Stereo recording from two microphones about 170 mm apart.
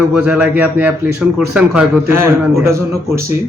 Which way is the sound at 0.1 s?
10° right (ahead or behind).